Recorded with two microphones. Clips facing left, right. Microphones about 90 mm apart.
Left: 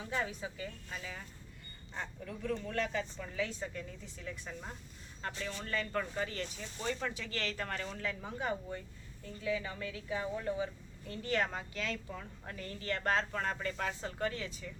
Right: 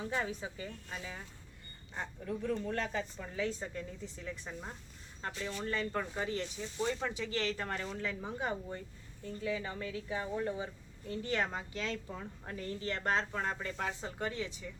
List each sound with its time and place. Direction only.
0.2 s speech: 30° right (ahead or behind)
2.2 s speech: 25° right (ahead or behind)